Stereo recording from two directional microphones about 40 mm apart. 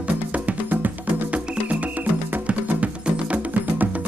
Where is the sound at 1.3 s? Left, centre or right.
Right.